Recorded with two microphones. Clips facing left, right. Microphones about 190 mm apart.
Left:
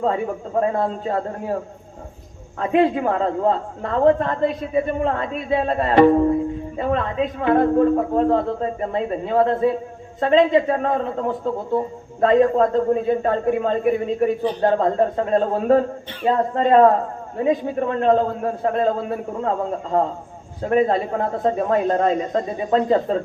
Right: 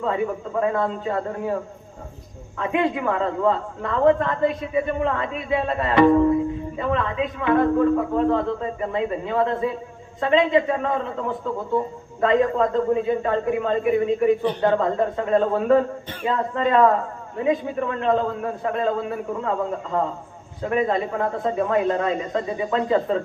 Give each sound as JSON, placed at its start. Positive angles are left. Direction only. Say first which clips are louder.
{"t": 0.0, "sound": "a man's voice", "louder": "left 2 dB", "side_deg": 35}
{"t": 2.6, "sound": "a man's voice", "louder": "left 4 dB", "side_deg": 40}